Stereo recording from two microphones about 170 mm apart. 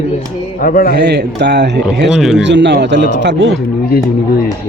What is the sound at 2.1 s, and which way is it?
Speech, centre (ahead or behind).